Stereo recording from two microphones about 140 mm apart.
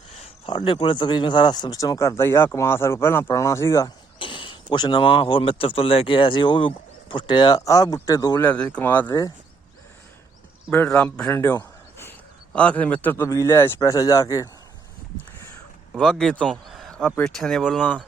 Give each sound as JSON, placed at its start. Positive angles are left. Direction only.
{"t": 0.2, "sound": "speech", "side_deg": 35}
{"t": 4.2, "sound": "speech", "side_deg": 35}
{"t": 8.4, "sound": "speech", "side_deg": 10}
{"t": 10.7, "sound": "a man's voice", "side_deg": 15}
{"t": 15.9, "sound": "speech", "side_deg": 0}
{"t": 16.4, "sound": "a sound", "side_deg": 5}
{"t": 17.2, "sound": "speech", "side_deg": 5}